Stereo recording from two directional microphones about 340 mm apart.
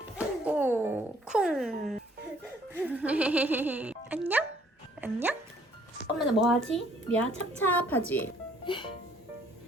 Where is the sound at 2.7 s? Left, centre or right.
Centre.